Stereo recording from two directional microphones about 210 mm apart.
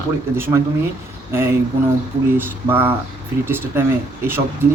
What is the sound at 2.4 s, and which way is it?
Speech, 10° right (ahead or behind).